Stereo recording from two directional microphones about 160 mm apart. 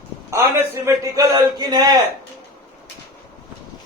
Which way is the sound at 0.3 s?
15° right (ahead or behind).